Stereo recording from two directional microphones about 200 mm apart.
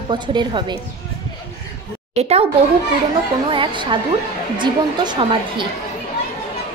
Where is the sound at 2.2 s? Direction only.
30° right (ahead or behind).